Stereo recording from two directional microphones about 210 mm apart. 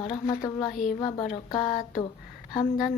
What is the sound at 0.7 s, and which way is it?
Speech, 35° left (ahead or behind).